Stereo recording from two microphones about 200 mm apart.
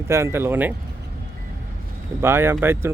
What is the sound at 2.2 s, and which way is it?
Speech, 10° right (ahead or behind).